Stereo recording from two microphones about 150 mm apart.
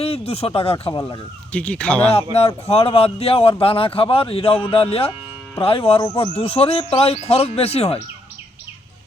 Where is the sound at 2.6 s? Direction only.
40° left (ahead or behind).